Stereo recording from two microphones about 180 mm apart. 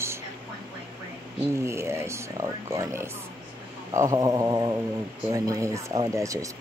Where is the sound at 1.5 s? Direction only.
15° right (ahead or behind).